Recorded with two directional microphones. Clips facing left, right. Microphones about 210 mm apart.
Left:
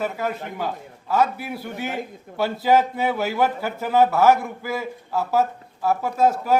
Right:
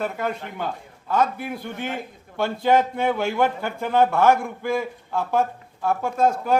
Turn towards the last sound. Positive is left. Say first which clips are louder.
# left 1 dB
turn(degrees=5)  # may be behind; listen again after turning